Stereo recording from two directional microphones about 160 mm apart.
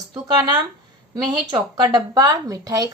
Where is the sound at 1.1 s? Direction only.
30° right (ahead or behind).